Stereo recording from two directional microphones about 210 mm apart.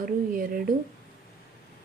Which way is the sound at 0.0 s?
40° right (ahead or behind).